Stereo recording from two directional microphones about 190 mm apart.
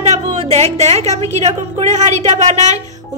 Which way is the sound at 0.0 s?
35° right (ahead or behind).